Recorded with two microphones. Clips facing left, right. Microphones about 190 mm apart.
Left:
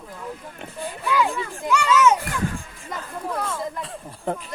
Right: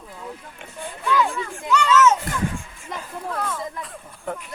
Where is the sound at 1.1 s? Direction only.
Centre (ahead or behind).